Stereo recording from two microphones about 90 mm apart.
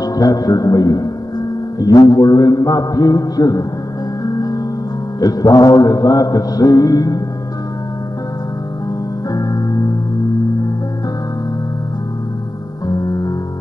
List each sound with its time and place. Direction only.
0.0 s mantra: 45° left (ahead or behind)
4.2 s music: 45° left (ahead or behind)
5.2 s mantra: 45° left (ahead or behind)
9.3 s music: 45° left (ahead or behind)
12.8 s music: 45° left (ahead or behind)